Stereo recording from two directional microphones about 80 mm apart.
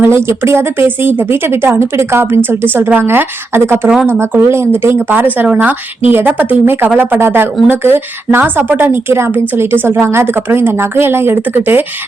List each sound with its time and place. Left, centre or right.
0.0 s a woman's voice: right